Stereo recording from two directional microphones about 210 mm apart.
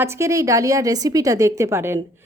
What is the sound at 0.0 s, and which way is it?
Speech, 15° right (ahead or behind).